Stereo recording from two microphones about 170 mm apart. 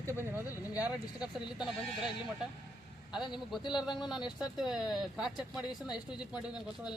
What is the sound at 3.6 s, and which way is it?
Speech, 25° left (ahead or behind).